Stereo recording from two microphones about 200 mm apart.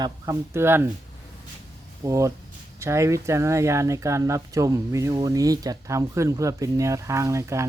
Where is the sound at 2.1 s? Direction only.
15° right (ahead or behind).